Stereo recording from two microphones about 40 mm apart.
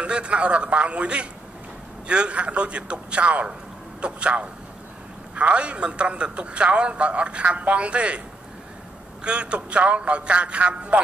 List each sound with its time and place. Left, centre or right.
0.0 s a man's voice: right
9.2 s a man's voice: right